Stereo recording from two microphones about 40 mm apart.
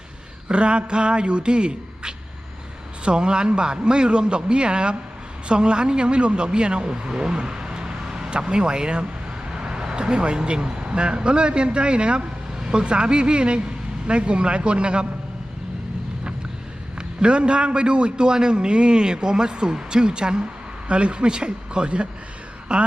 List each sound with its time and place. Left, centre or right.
0.4 s a man's voice: right
17.2 s a man's voice: right